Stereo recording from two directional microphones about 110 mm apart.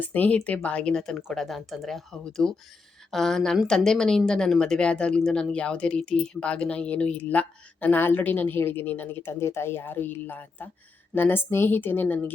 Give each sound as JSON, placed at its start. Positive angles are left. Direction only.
{"t": 0.0, "sound": "a woman's voice", "side_deg": 15}